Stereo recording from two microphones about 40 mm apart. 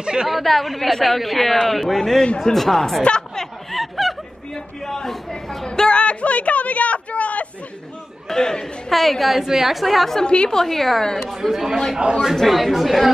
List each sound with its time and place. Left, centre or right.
0.0 s a woman's voice: right
0.3 s a woman's voice: centre
2.2 s a woman's voice: centre
2.5 s a woman's voice: centre
3.0 s a woman's voice: centre
3.7 s snicker: centre
4.8 s speech: centre
5.7 s a sound: left
8.3 s a woman's voice: centre
8.9 s a woman's voice: centre
10.2 s a woman's voice: left
10.5 s a woman's voice: centre
12.0 s a man's voice: right
12.4 s a woman's voice: centre